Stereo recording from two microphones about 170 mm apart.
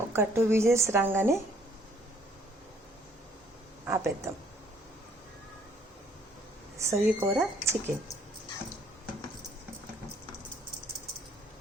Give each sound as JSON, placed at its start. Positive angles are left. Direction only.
{"t": 0.1, "sound": "speech", "side_deg": -15}
{"t": 3.8, "sound": "speech", "side_deg": -15}
{"t": 6.7, "sound": "speech", "side_deg": -15}